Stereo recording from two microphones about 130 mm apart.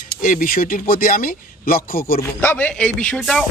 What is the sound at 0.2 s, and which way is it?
Speech, 90° left.